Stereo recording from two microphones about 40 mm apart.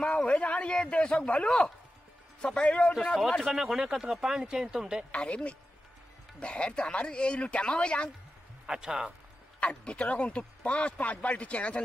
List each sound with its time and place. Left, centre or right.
0.0 s speech: left
2.8 s speech: centre
3.5 s speech: centre
5.1 s speech: left
8.6 s speech: centre
9.6 s speech: left